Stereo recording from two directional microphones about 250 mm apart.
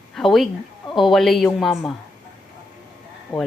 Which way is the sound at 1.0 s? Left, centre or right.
Centre.